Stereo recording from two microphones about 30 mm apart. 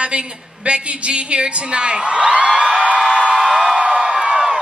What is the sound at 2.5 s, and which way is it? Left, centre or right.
Music, right.